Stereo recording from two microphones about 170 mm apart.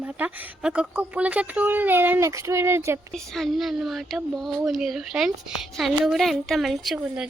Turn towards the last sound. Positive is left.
turn(degrees=0)  # may be behind; listen again after turning